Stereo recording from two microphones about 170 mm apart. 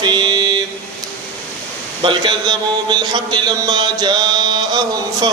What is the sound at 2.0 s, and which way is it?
A man's voice, 30° right (ahead or behind).